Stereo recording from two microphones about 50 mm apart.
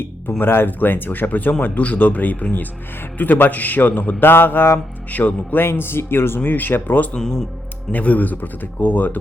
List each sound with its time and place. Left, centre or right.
0.0 s speech: left
5.1 s speech: left
6.4 s speech: left
7.2 s speech: centre
7.9 s speech: left